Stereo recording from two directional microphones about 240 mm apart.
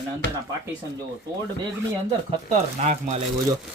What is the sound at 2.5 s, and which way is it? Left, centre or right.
Speech, right.